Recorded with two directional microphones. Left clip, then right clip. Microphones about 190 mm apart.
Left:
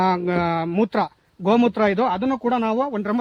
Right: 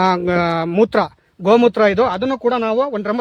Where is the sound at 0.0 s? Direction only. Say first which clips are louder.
Right 5 dB; 55° right (ahead or behind).